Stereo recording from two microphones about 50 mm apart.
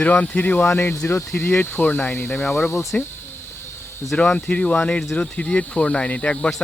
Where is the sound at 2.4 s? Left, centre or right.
Centre.